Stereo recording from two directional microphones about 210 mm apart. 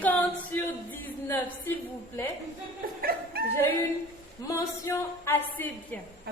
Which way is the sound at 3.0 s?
45° right (ahead or behind).